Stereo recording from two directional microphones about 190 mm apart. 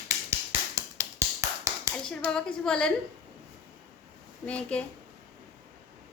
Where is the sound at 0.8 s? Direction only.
15° right (ahead or behind).